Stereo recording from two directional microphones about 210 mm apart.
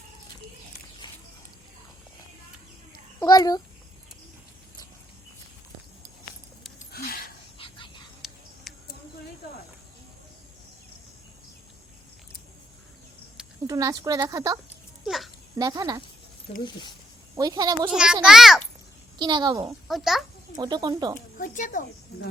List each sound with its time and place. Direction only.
1.0 s music: 20° left (ahead or behind)
3.2 s a child's voice: 20° left (ahead or behind)
6.7 s a sound: 45° left (ahead or behind)
7.6 s whispering: 25° left (ahead or behind)
8.2 s a sound: centre (ahead or behind)
13.7 s speech: 15° right (ahead or behind)
15.0 s babbling: centre (ahead or behind)
15.5 s speech: 15° right (ahead or behind)
17.3 s speech: 20° right (ahead or behind)
17.8 s a child's voice: 5° right (ahead or behind)
19.2 s speech: 20° right (ahead or behind)
19.9 s a child's voice: centre (ahead or behind)
20.6 s speech: 20° right (ahead or behind)
21.3 s speech: 40° left (ahead or behind)